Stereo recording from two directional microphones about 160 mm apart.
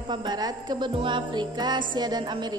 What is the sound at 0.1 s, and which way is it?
Music, 25° right (ahead or behind).